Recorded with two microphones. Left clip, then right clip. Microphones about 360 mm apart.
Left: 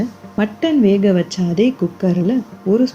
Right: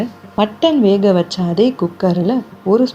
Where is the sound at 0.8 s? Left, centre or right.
Right.